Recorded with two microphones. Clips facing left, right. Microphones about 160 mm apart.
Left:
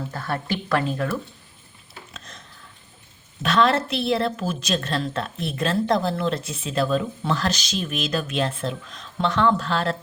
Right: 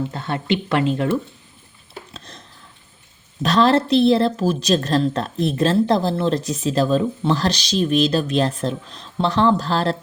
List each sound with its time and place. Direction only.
0.1 s a woman's voice: 25° right (ahead or behind)
2.1 s a sound: 35° right (ahead or behind)
3.4 s a woman's voice: 35° right (ahead or behind)